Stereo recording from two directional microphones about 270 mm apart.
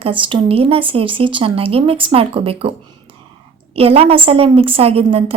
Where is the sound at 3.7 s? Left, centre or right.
Right.